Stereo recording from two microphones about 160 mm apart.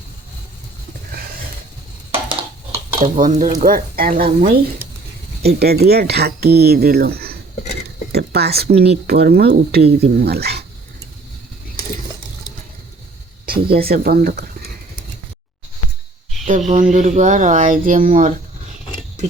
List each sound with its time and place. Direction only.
3.0 s speech: 55° right (ahead or behind)
5.4 s speech: 80° right
8.1 s speech: 90° right
13.4 s speech: 70° right (ahead or behind)
16.5 s speech: 50° right (ahead or behind)